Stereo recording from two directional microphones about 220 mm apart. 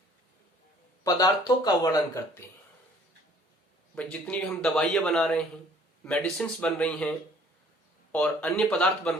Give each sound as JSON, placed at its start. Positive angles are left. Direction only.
{"t": 1.0, "sound": "speech", "side_deg": 15}
{"t": 3.9, "sound": "speech", "side_deg": 5}
{"t": 8.1, "sound": "speech", "side_deg": 5}